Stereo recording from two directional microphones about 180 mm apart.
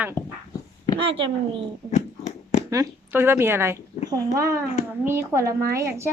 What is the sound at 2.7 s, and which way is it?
A woman's voice, 15° right (ahead or behind).